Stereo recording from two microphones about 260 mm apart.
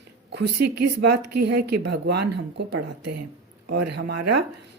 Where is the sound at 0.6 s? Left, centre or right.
Right.